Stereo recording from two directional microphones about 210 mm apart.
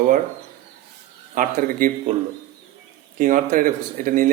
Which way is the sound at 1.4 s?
40° right (ahead or behind).